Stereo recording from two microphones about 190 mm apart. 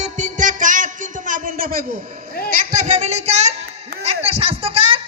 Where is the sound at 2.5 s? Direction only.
40° right (ahead or behind).